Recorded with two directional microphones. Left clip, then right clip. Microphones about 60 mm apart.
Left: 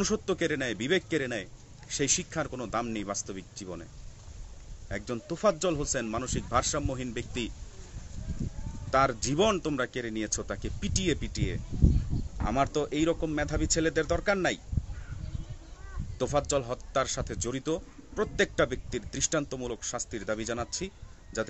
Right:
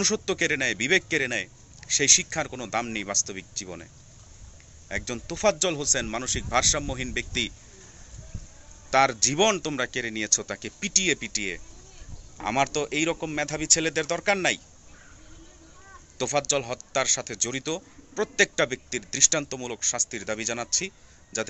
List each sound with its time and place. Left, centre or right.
0.0 s a man's voice: left
5.0 s a man's voice: centre
8.9 s a man's voice: centre
16.2 s a man's voice: left